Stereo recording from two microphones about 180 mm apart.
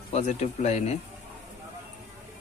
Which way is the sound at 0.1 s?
40° left (ahead or behind).